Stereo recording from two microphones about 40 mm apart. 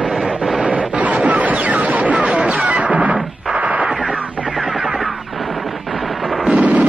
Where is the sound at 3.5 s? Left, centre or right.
Right.